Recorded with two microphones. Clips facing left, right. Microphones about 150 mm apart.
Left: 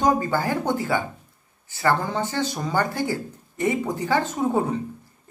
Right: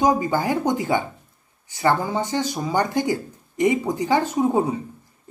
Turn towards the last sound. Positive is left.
turn(degrees=-10)  # may be behind; listen again after turning